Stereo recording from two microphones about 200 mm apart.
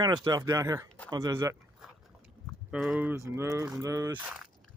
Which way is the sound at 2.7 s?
5° right (ahead or behind).